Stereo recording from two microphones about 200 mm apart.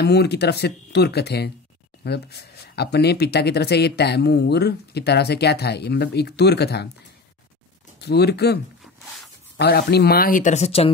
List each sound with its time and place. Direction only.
0.0 s speech: 55° left (ahead or behind)
8.0 s speech: 55° left (ahead or behind)
9.6 s speech: 55° left (ahead or behind); by 10.9 s 30° left (ahead or behind)